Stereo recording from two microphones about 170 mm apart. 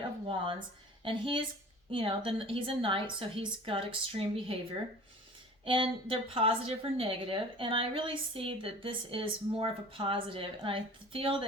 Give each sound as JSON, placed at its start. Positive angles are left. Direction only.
{"t": 1.0, "sound": "a woman's voice", "side_deg": -30}
{"t": 5.6, "sound": "a woman's voice", "side_deg": -30}